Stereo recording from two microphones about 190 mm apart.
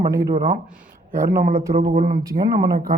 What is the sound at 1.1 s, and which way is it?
A man's voice, 45° right (ahead or behind).